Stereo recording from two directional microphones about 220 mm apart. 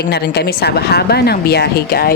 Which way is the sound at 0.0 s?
45° left (ahead or behind).